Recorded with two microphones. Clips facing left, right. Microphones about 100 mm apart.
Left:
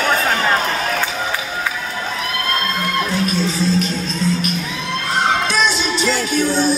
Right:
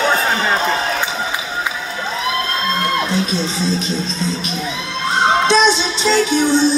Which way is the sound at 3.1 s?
20° right (ahead or behind).